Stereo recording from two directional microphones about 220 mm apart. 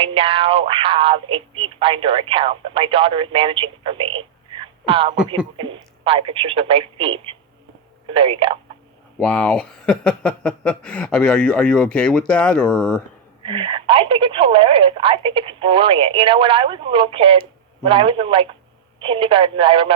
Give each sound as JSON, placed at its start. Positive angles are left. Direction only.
{"t": 0.0, "sound": "speech", "side_deg": -25}
{"t": 9.1, "sound": "speech", "side_deg": 5}
{"t": 13.4, "sound": "speech", "side_deg": -25}